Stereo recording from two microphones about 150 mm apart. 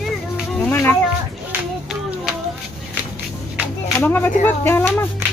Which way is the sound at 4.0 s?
15° left (ahead or behind).